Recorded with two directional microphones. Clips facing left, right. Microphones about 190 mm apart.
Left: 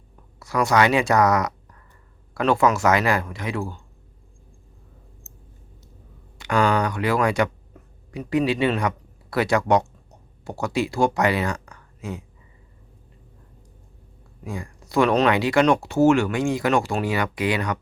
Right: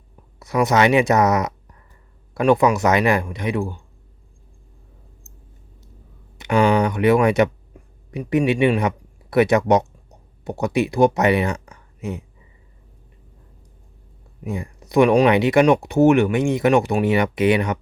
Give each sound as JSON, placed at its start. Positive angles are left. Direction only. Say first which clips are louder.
{"t": 0.3, "sound": "speech", "louder": "right 2 dB", "side_deg": -20}
{"t": 6.4, "sound": "speech", "louder": "right 4 dB", "side_deg": -20}
{"t": 7.7, "sound": "a sound", "louder": "right 2 dB", "side_deg": -10}
{"t": 8.1, "sound": "speech", "louder": "right 3 dB", "side_deg": -20}
{"t": 14.4, "sound": "speech", "louder": "right 5 dB", "side_deg": -20}